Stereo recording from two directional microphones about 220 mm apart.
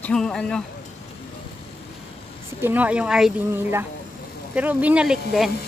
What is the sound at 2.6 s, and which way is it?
Speech, 10° right (ahead or behind).